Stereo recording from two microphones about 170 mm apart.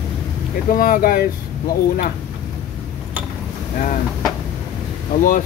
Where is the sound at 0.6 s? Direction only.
55° left (ahead or behind).